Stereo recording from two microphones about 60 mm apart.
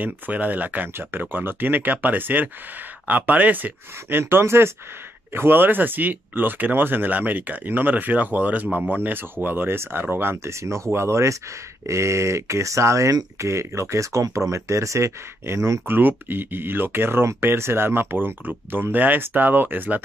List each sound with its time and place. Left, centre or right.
0.0 s speech: right
4.2 s speech: right
10.6 s speech: right
15.9 s speech: right